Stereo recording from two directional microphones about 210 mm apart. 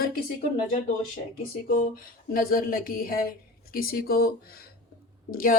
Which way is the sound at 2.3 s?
45° left (ahead or behind).